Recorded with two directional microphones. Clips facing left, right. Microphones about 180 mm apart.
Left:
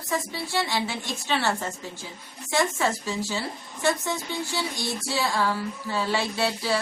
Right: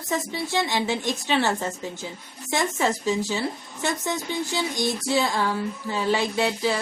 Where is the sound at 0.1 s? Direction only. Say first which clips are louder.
Right 2 dB; 20° right (ahead or behind).